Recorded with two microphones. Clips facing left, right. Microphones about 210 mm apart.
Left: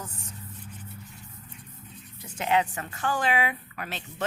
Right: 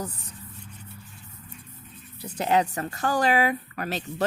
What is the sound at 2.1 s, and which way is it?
Speech, 35° right (ahead or behind).